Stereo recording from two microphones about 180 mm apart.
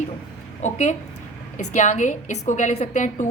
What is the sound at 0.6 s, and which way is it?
A woman's voice, 40° left (ahead or behind).